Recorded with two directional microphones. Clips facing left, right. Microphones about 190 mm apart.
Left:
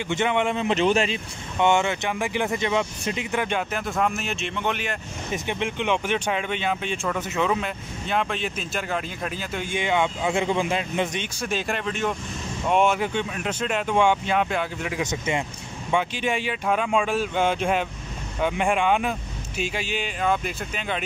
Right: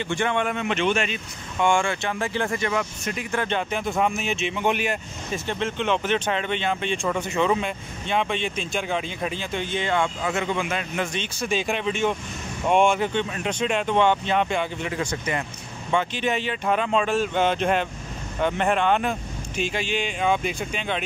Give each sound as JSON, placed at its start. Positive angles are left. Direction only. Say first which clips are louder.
{"t": 0.1, "sound": "a man's voice", "louder": "left 2 dB", "side_deg": 20}
{"t": 0.6, "sound": "speech", "louder": "left 2 dB", "side_deg": 35}
{"t": 5.3, "sound": "speech", "louder": "even", "side_deg": 15}
{"t": 10.3, "sound": "a man's voice", "louder": "left 2 dB", "side_deg": 30}
{"t": 11.4, "sound": "speech", "louder": "right 3 dB", "side_deg": 0}
{"t": 15.0, "sound": "a man's voice", "louder": "left 1 dB", "side_deg": 20}
{"t": 15.9, "sound": "speech", "louder": "even", "side_deg": 10}